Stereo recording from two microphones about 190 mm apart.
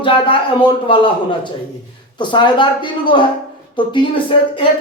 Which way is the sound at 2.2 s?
25° left (ahead or behind).